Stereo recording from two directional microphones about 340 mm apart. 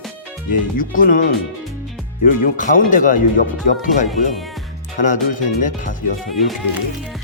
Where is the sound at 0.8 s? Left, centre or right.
Left.